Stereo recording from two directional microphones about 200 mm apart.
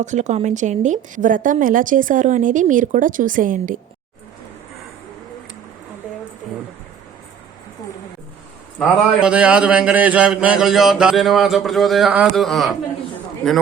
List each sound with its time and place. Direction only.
0.0 s a woman's voice: 35° right (ahead or behind)
9.2 s speech: 5° right (ahead or behind)